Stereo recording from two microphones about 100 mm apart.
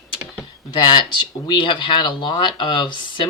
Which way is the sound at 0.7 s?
50° left (ahead or behind).